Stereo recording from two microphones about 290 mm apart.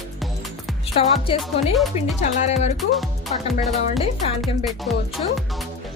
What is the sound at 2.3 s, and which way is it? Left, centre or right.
Speech, left.